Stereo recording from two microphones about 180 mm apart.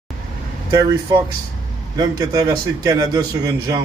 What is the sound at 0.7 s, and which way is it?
A man's voice, 25° right (ahead or behind).